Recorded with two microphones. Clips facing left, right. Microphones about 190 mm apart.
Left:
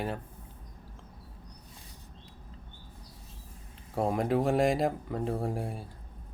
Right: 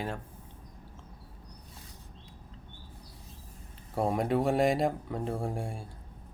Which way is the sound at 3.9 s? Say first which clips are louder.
Even; centre (ahead or behind).